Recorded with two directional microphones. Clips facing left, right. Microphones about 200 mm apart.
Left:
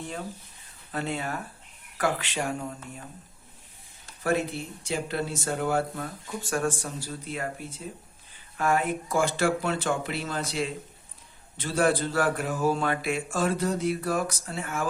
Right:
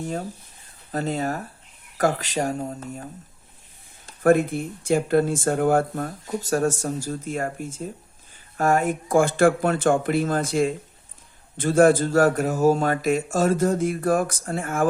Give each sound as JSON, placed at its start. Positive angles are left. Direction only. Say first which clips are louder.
{"t": 0.9, "sound": "speech", "louder": "right 6 dB", "side_deg": -40}
{"t": 4.2, "sound": "speech", "louder": "right 9 dB", "side_deg": -50}